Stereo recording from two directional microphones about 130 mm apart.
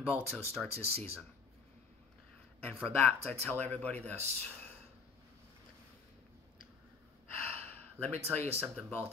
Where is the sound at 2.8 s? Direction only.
15° left (ahead or behind).